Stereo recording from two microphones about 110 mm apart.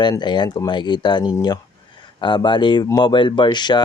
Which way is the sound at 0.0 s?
45° left (ahead or behind).